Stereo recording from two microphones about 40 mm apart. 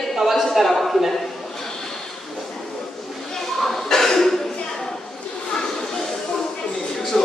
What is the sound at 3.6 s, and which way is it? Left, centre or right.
Cough, centre.